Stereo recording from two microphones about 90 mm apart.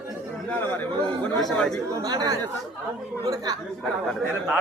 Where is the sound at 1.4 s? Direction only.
5° left (ahead or behind).